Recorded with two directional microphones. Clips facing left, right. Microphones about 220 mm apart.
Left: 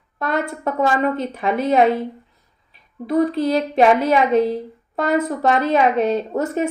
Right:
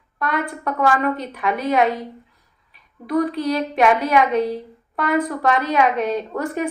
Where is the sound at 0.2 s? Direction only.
25° left (ahead or behind).